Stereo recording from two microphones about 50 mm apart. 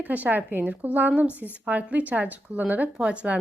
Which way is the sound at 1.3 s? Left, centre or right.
Left.